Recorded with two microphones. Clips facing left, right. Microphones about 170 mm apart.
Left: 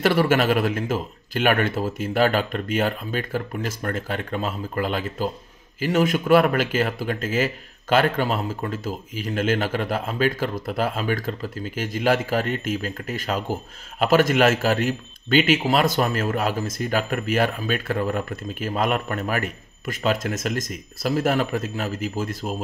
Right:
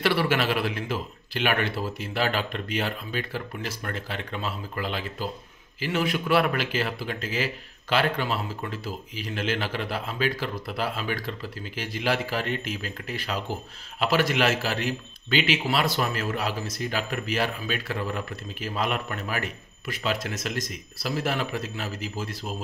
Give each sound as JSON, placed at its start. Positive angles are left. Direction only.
{"t": 0.0, "sound": "speech", "side_deg": 45}